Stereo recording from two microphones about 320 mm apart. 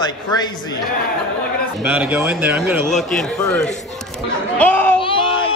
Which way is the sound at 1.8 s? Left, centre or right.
Centre.